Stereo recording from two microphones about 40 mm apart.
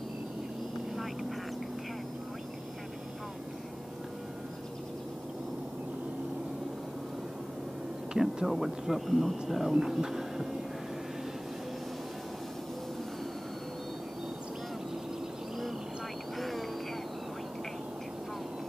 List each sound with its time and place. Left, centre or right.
8.1 s speech: centre
9.8 s hum: centre
16.3 s vehicle: centre